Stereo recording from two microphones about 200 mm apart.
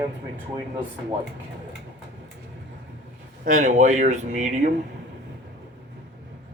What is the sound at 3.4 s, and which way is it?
Speech, 40° right (ahead or behind).